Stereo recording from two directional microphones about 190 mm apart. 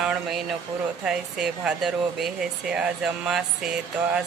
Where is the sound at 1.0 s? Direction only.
5° right (ahead or behind).